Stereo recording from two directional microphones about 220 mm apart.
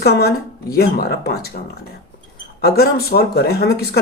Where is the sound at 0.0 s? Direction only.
45° left (ahead or behind).